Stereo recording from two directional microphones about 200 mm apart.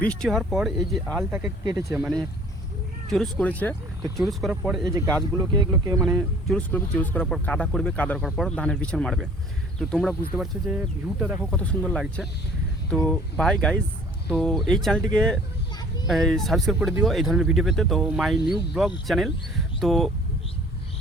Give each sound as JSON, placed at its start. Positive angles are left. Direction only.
{"t": 0.0, "sound": "speech", "side_deg": 5}
{"t": 1.6, "sound": "speech", "side_deg": -15}
{"t": 4.9, "sound": "speech", "side_deg": -15}
{"t": 6.0, "sound": "speech", "side_deg": 0}
{"t": 11.5, "sound": "speech", "side_deg": 5}